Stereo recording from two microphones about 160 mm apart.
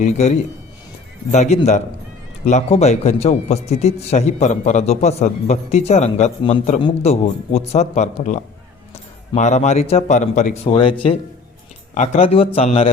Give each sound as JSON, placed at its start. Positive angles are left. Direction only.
{"t": 0.0, "sound": "a man's voice", "side_deg": 45}
{"t": 11.9, "sound": "a man's voice", "side_deg": 45}